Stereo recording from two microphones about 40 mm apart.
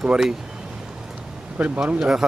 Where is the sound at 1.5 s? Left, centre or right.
Right.